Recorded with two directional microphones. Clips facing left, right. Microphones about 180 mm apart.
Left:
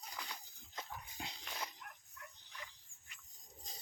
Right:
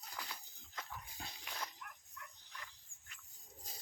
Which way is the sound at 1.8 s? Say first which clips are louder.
Even; 30° left (ahead or behind).